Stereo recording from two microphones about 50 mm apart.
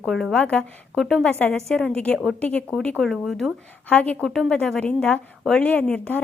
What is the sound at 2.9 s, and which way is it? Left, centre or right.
Speech, centre.